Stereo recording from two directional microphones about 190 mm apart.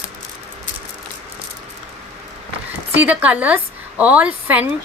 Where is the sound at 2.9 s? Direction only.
10° right (ahead or behind).